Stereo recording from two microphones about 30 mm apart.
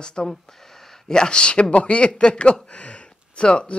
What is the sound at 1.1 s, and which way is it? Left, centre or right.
Speech, left.